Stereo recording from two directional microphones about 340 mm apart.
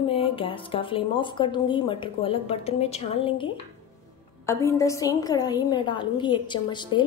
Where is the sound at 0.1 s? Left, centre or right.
Centre.